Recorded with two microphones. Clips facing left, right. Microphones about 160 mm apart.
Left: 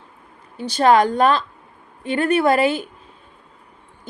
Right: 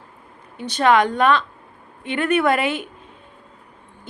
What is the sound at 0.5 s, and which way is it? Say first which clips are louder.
A woman's voice: left 2 dB; 35° left (ahead or behind).